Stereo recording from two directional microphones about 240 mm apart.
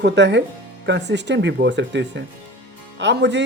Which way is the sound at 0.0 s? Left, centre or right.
Right.